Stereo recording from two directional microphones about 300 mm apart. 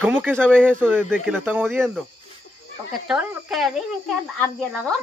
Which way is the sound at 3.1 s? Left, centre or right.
Centre.